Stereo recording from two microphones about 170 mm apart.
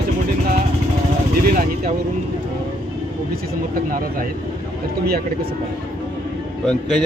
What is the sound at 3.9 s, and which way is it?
Speech, 55° right (ahead or behind).